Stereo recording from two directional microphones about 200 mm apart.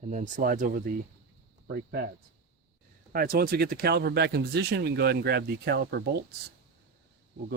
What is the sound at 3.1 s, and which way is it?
Speech, 45° right (ahead or behind).